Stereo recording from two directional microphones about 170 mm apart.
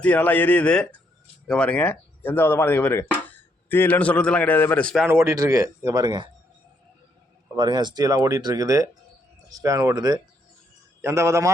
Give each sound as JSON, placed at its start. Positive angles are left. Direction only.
{"t": 0.0, "sound": "speech", "side_deg": 10}
{"t": 5.0, "sound": "speech", "side_deg": -15}
{"t": 7.5, "sound": "a man's voice", "side_deg": -25}